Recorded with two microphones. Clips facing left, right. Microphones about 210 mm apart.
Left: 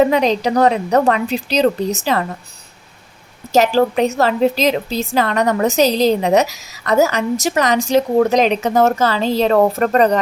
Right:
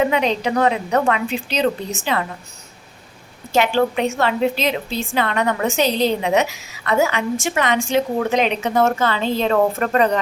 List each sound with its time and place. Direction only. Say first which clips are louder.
0.0 s a woman's voice: left 4 dB; 40° left (ahead or behind)
3.5 s a woman's voice: left 4 dB; 40° left (ahead or behind)